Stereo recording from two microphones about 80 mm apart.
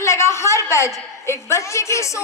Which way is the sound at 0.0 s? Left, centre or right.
Left.